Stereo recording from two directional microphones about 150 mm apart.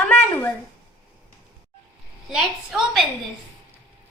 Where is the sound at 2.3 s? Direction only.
Centre (ahead or behind).